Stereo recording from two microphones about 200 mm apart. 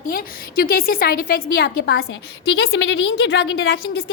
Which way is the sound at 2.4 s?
75° left (ahead or behind).